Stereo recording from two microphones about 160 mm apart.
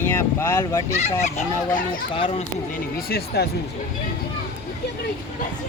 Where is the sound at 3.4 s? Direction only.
85° left.